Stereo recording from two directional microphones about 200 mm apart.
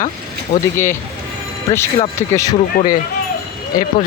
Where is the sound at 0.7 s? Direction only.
10° left (ahead or behind).